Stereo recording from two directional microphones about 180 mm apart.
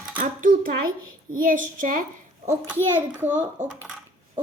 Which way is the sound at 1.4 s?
50° right (ahead or behind).